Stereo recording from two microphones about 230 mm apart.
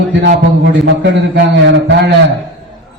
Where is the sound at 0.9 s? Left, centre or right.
Right.